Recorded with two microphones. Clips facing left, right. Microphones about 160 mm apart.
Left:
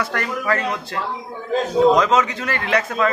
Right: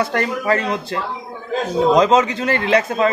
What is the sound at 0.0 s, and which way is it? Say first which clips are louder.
A man's voice: right 4 dB; 25° right (ahead or behind).